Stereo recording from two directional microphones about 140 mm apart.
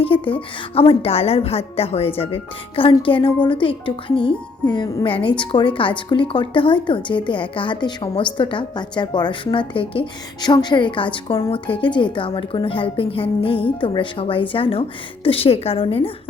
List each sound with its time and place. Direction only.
0.0 s a woman's voice: 40° left (ahead or behind)